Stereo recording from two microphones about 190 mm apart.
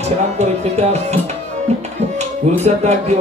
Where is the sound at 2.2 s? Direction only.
35° right (ahead or behind).